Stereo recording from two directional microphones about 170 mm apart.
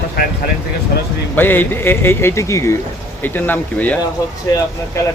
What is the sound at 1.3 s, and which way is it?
Speech, 10° left (ahead or behind).